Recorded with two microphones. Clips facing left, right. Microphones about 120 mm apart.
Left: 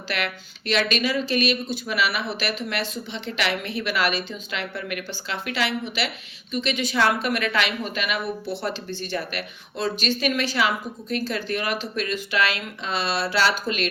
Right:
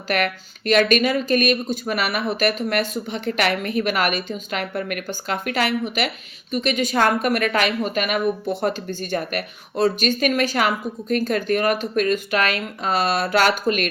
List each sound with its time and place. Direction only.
0.1 s speech: 45° right (ahead or behind)